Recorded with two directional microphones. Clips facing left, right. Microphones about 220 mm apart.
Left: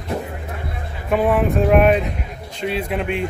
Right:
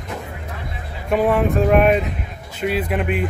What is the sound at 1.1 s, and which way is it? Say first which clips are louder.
Speech: even; centre (ahead or behind).